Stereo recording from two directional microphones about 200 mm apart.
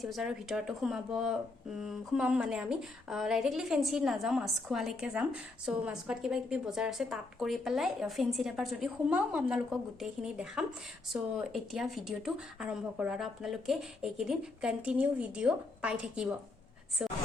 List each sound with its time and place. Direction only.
0.0 s a woman's voice: centre (ahead or behind)